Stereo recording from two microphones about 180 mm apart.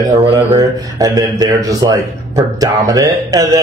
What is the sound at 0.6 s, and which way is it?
Speech, 20° right (ahead or behind).